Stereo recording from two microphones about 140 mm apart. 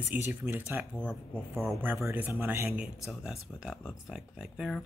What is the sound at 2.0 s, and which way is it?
Speech, 15° right (ahead or behind).